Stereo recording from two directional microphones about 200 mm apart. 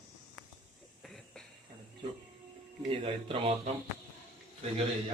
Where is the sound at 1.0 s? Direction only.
Centre (ahead or behind).